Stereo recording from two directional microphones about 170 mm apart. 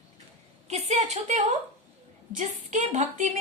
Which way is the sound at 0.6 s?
40° right (ahead or behind).